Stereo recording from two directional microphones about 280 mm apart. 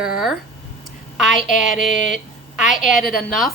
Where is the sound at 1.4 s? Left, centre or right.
Left.